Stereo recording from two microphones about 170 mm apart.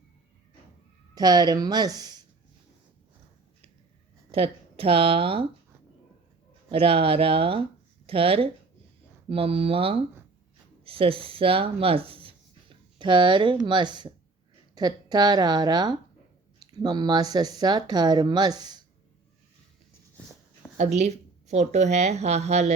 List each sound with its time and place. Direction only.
1.1 s speech: 20° right (ahead or behind)
4.3 s speech: 35° right (ahead or behind)
6.7 s a woman's voice: 35° right (ahead or behind)
20.7 s a woman's voice: 40° right (ahead or behind)